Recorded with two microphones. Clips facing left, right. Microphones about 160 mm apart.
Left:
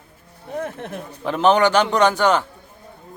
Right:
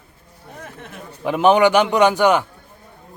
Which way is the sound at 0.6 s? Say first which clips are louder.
Left 8 dB; 55° left (ahead or behind).